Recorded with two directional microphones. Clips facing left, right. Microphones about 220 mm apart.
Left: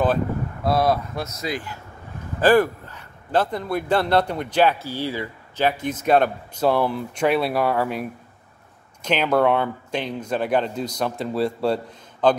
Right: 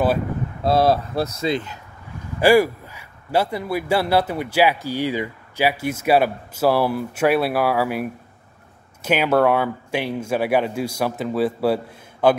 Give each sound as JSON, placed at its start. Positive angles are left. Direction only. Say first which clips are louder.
{"t": 0.7, "sound": "speech", "louder": "right 3 dB", "side_deg": -30}
{"t": 2.4, "sound": "speech", "louder": "right 2 dB", "side_deg": -10}